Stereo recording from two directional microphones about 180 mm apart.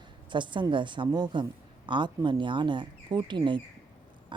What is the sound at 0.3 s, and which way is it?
Speech, 25° right (ahead or behind).